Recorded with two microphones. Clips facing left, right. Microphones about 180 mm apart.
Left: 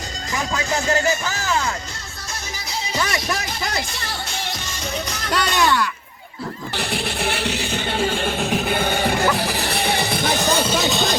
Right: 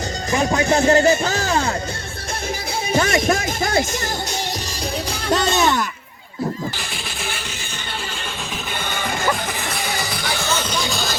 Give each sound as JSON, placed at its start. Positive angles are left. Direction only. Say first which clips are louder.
{"t": 0.3, "sound": "speech", "louder": "right 6 dB", "side_deg": -30}
{"t": 2.9, "sound": "speech", "louder": "right 7 dB", "side_deg": -50}
{"t": 5.3, "sound": "speech", "louder": "right 2 dB", "side_deg": -25}
{"t": 6.7, "sound": "music", "louder": "left 7 dB", "side_deg": 65}
{"t": 7.9, "sound": "music", "louder": "left 9 dB", "side_deg": 55}
{"t": 9.4, "sound": "music", "louder": "left 3 dB", "side_deg": 35}
{"t": 9.7, "sound": "music", "louder": "left 4 dB", "side_deg": 60}
{"t": 10.4, "sound": "music", "louder": "left 2 dB", "side_deg": 35}
{"t": 10.9, "sound": "vehicle", "louder": "left 5 dB", "side_deg": 20}